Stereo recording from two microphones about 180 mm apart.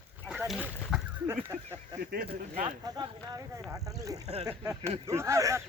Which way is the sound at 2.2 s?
30° right (ahead or behind).